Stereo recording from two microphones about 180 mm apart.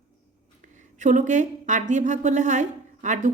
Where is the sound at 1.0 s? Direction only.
45° right (ahead or behind).